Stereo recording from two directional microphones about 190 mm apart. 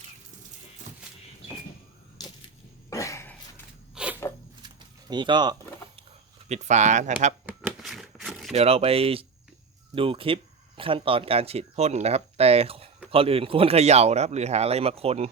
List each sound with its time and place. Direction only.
2.9 s cough: 15° left (ahead or behind)
3.9 s a sound: 5° right (ahead or behind)
4.6 s a sound: 25° right (ahead or behind)
6.5 s speech: 40° right (ahead or behind)
7.4 s shuffling cards: 5° right (ahead or behind)
8.5 s speech: 30° right (ahead or behind)